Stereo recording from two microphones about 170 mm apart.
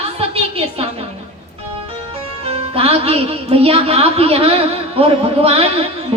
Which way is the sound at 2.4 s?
35° right (ahead or behind).